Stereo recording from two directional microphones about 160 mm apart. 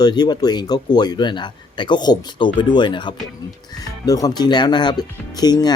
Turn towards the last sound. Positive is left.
turn(degrees=25)  # may be behind; listen again after turning